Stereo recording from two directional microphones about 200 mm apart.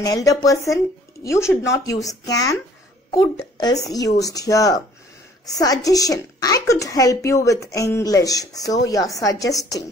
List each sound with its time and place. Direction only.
0.0 s a woman's voice: 20° left (ahead or behind)